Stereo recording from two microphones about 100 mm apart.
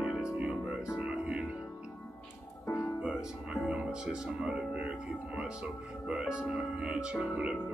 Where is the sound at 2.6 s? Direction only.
30° left (ahead or behind).